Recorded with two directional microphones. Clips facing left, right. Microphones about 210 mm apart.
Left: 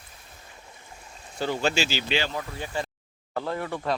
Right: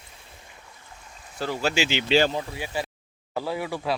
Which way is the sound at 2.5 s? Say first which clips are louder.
Right 1 dB; 5° right (ahead or behind).